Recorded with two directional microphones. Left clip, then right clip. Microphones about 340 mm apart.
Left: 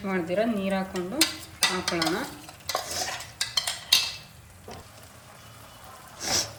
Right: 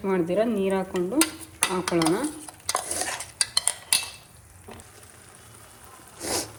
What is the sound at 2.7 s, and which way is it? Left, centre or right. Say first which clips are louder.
Stir: right 1 dB; right.